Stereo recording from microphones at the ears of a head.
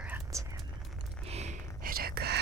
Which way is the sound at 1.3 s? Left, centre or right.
Right.